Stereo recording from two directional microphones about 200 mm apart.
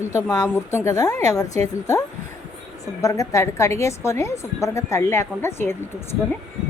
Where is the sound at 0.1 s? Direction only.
15° left (ahead or behind).